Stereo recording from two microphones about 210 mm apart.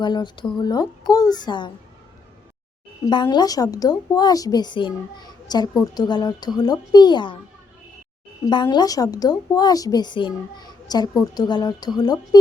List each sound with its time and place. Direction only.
0.0 s a woman's voice: 20° left (ahead or behind)
3.1 s a woman's voice: 20° left (ahead or behind)
8.4 s a woman's voice: 20° left (ahead or behind)